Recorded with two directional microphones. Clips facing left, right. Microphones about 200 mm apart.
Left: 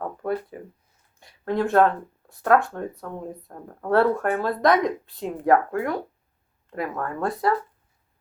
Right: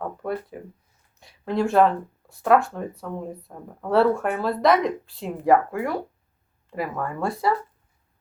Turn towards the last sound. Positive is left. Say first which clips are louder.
# even
turn(degrees=0)  # may be behind; listen again after turning